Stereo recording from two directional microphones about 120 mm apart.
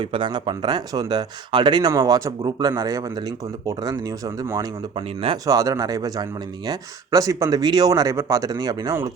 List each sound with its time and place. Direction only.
0.0 s speech: 40° right (ahead or behind)
4.9 s speech: 45° right (ahead or behind)
5.5 s speech: 30° right (ahead or behind)